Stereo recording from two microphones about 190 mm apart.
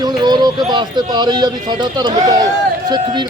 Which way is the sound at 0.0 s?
20° right (ahead or behind).